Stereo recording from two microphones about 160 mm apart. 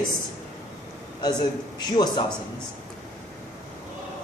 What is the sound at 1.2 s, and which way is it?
Speech, 25° left (ahead or behind).